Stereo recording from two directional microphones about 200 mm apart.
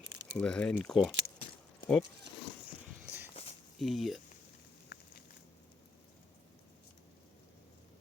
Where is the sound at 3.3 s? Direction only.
30° left (ahead or behind).